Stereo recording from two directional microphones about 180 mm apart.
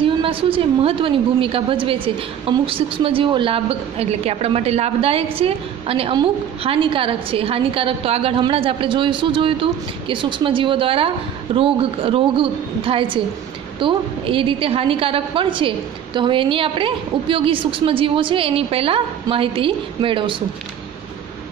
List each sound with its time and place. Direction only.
0.0 s a woman's voice: 30° right (ahead or behind)